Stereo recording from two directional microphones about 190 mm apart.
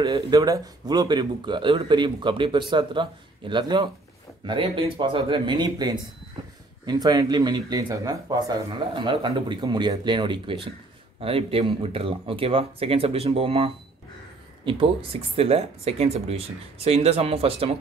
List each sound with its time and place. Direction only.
0.0 s speech: 20° right (ahead or behind)